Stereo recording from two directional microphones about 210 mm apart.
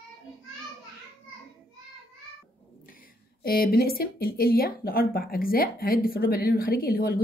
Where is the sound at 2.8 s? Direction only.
40° left (ahead or behind).